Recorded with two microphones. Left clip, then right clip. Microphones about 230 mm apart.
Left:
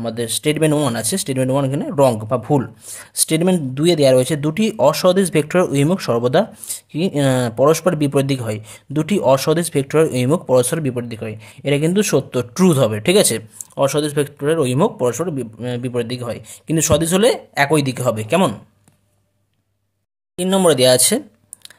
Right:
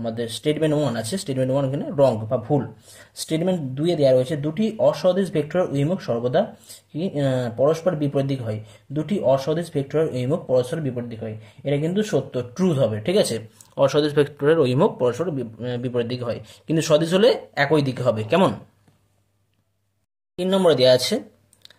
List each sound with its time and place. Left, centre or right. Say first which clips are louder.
0.0 s speech: left 4 dB; left
20.3 s speech: left 3 dB; left